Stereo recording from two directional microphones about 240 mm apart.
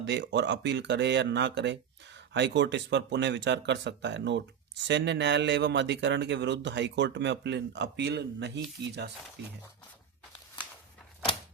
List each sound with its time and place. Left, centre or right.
0.0 s speech: right